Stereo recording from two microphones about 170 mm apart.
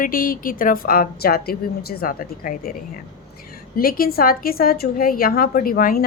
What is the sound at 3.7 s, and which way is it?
A woman's voice, 60° left (ahead or behind).